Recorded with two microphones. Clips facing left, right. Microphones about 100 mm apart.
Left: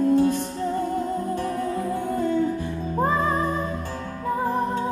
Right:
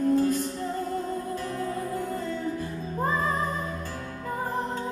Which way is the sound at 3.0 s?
55° left (ahead or behind).